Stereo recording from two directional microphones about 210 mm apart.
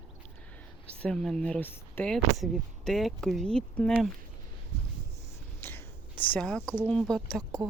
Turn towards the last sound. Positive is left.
turn(degrees=5)  # may be behind; listen again after turning